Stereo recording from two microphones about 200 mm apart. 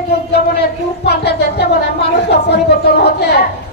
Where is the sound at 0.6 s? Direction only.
55° left (ahead or behind).